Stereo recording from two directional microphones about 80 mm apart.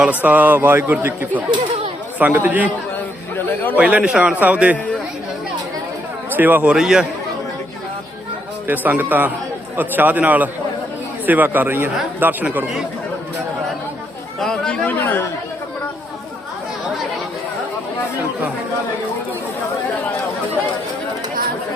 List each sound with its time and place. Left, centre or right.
0.0 s a man's voice: right
3.3 s chatter: left
3.8 s a man's voice: centre
6.3 s a man's voice: right
6.7 s a man's voice: centre
8.6 s a man's voice: right
14.3 s chatter: centre
14.8 s chatter: left